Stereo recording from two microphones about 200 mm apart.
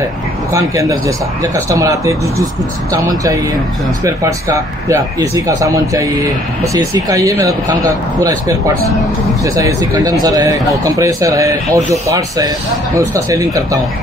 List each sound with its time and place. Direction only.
0.5 s speech: 15° right (ahead or behind)
5.3 s speech: 15° right (ahead or behind)